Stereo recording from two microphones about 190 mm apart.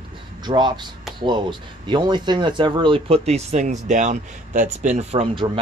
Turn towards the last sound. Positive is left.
turn(degrees=-30)  # may be behind; listen again after turning